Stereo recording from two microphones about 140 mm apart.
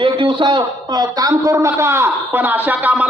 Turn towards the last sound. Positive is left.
turn(degrees=-10)  # may be behind; listen again after turning